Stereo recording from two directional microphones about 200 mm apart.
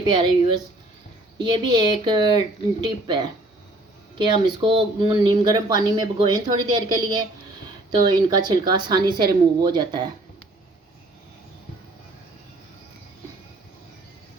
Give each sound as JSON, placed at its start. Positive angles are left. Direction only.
{"t": 0.0, "sound": "speech", "side_deg": -20}